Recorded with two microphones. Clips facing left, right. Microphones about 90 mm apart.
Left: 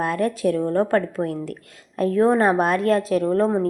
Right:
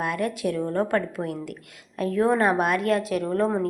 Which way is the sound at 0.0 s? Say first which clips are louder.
Left 5 dB; 35° left (ahead or behind).